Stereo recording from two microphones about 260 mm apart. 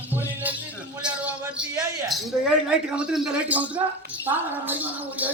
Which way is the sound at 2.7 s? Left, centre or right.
Centre.